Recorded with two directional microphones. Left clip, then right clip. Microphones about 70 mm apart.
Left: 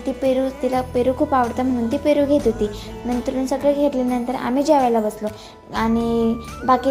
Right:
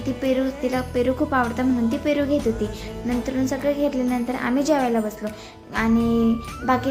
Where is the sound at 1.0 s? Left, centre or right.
Left.